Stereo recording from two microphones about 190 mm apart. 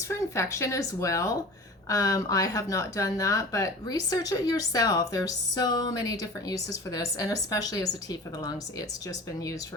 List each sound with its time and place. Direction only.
0.1 s speech: 15° left (ahead or behind)